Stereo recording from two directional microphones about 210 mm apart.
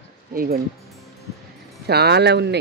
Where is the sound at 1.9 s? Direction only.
50° right (ahead or behind).